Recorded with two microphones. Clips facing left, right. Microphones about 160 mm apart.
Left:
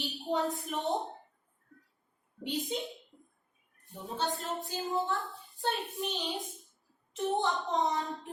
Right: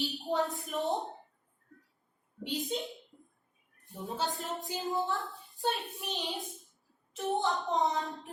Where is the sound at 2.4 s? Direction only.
Centre (ahead or behind).